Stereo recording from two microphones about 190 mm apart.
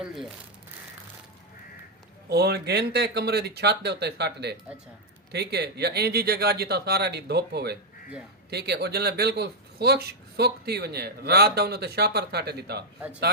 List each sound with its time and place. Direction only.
0.0 s speech: centre (ahead or behind)
2.3 s speech: 60° right (ahead or behind)